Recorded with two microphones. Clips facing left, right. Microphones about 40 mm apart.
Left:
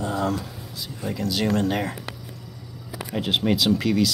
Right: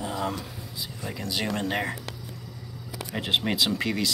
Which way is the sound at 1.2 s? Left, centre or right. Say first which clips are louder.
Left 6 dB; centre.